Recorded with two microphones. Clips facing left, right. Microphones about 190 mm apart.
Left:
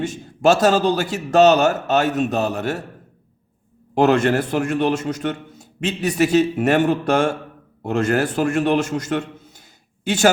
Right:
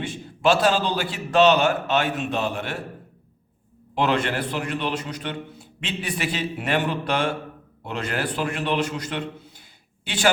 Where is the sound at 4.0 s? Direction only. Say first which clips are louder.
Left 7 dB; 45° left (ahead or behind).